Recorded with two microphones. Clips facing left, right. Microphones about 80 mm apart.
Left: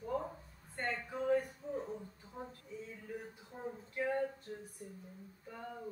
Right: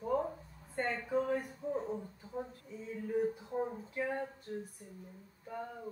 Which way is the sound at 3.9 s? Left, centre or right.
Centre.